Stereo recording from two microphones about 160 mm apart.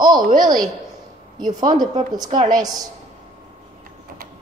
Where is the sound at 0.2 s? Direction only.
55° right (ahead or behind).